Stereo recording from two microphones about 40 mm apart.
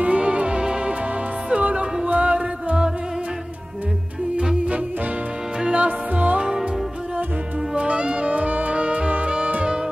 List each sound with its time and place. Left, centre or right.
0.0 s music: right
5.8 s music: right
7.7 s music: right